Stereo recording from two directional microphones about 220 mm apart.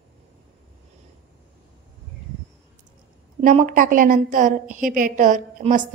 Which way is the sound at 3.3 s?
35° right (ahead or behind).